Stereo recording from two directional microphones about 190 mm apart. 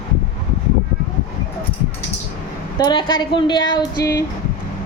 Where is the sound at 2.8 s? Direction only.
25° left (ahead or behind).